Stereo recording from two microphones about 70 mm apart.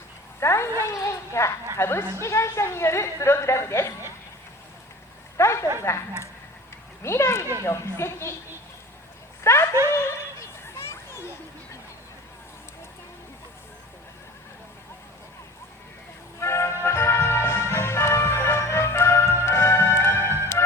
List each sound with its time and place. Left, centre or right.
0.3 s a woman's voice: left
5.4 s a woman's voice: left
7.0 s a woman's voice: left
9.4 s speech: left
9.9 s a sound: left
16.4 s music: left